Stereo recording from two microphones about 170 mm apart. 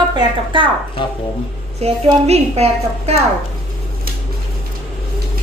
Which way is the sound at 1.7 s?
40° right (ahead or behind).